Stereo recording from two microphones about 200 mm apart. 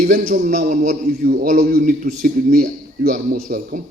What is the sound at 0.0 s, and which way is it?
A man's voice, 45° right (ahead or behind).